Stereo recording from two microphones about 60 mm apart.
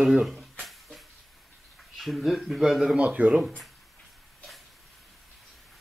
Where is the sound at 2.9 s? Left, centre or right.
Right.